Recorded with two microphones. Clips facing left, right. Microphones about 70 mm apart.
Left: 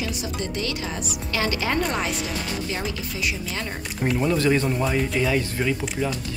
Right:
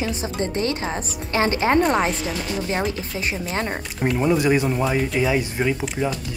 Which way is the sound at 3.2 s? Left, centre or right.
Right.